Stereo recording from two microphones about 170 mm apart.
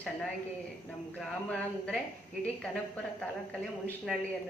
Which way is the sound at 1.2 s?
5° left (ahead or behind).